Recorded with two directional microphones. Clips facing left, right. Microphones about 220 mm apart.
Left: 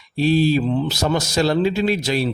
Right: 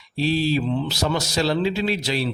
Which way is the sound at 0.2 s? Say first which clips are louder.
Left 5 dB; 50° left (ahead or behind).